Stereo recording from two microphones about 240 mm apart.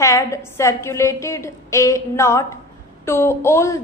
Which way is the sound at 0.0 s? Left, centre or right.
Centre.